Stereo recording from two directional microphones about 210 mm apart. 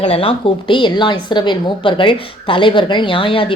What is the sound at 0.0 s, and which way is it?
A woman's voice, 25° left (ahead or behind).